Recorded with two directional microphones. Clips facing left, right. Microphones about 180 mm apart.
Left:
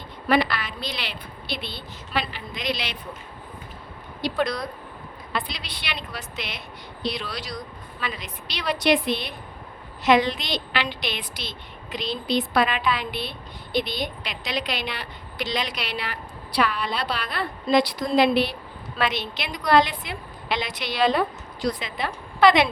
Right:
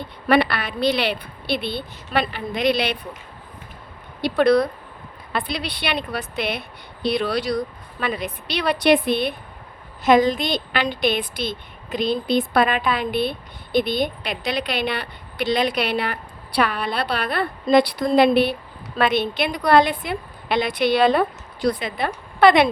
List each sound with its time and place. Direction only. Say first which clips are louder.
0.3 s a woman's voice: right 4 dB; 65° right (ahead or behind)
4.2 s a woman's voice: right 9 dB; 65° right (ahead or behind)